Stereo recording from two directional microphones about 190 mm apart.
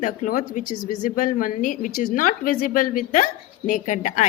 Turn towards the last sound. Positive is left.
turn(degrees=40)  # may be behind; listen again after turning